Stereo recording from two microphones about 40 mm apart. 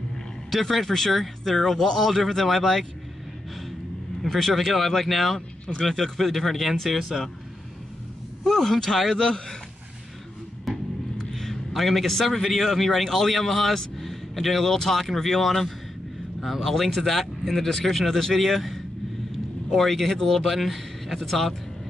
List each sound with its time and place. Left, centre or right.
0.5 s a man's voice: centre
4.2 s a man's voice: centre
8.5 s speech: centre
11.3 s a man's voice: centre
20.3 s a man's voice: centre